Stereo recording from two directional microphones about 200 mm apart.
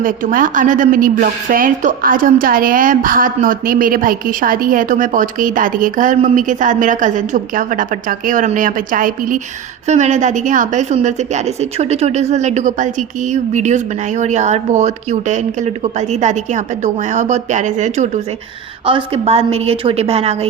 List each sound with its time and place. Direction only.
0.0 s a woman's voice: 45° right (ahead or behind)